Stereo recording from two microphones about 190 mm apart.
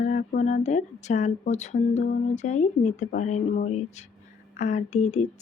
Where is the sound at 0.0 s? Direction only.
40° left (ahead or behind).